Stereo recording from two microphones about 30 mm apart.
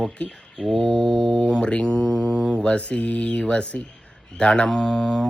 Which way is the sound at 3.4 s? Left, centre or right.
Left.